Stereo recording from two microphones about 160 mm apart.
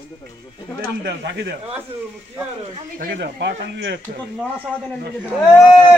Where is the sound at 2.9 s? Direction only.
75° right (ahead or behind).